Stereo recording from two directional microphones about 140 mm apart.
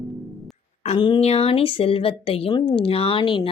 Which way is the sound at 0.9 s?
30° left (ahead or behind).